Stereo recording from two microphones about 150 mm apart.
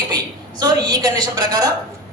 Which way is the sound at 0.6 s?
25° right (ahead or behind).